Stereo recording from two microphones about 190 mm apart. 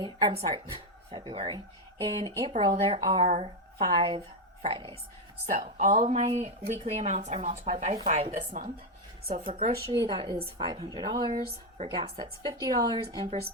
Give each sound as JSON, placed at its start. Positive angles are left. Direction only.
{"t": 0.0, "sound": "a woman's voice", "side_deg": -25}
{"t": 5.5, "sound": "a woman's voice", "side_deg": -40}
{"t": 9.8, "sound": "speech", "side_deg": -20}